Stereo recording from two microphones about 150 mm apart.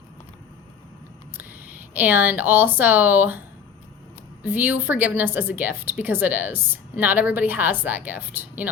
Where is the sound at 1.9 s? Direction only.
10° right (ahead or behind).